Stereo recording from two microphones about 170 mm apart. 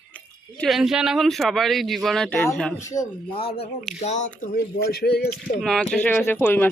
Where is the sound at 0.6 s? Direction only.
Centre (ahead or behind).